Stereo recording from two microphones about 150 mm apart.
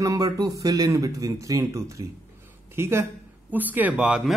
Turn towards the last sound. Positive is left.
turn(degrees=-5)  # may be behind; listen again after turning